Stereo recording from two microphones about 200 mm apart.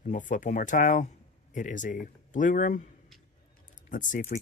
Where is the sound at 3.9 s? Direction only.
40° left (ahead or behind).